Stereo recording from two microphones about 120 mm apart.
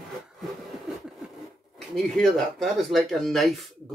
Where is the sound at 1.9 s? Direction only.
Centre (ahead or behind).